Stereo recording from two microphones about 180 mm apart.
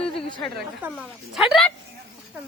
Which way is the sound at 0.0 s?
30° left (ahead or behind).